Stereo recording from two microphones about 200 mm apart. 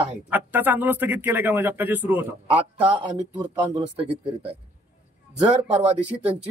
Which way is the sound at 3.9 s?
30° right (ahead or behind).